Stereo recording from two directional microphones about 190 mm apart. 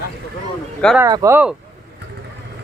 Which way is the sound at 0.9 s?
15° right (ahead or behind).